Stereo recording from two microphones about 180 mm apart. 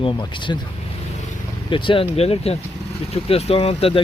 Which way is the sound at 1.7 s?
30° left (ahead or behind).